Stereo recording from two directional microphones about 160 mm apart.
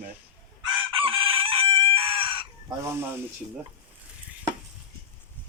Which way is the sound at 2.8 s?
15° right (ahead or behind).